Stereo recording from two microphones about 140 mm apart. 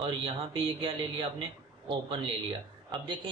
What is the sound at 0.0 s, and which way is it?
A man's voice, 40° right (ahead or behind).